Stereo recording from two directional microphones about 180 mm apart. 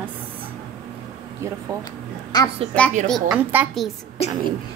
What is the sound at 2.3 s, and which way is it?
Speech, 20° left (ahead or behind).